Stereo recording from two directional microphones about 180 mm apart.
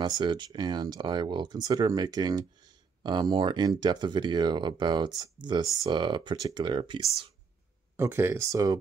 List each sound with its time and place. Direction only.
0.0 s speech: 25° right (ahead or behind)
8.0 s speech: 15° right (ahead or behind)